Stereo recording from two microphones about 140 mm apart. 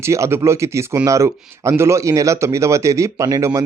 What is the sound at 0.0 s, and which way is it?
Speech, 20° right (ahead or behind).